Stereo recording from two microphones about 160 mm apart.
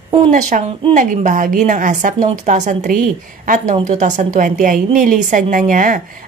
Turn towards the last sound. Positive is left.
turn(degrees=-55)  # may be behind; listen again after turning